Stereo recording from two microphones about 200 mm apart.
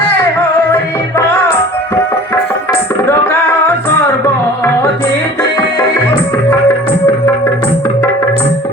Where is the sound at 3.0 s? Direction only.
10° left (ahead or behind).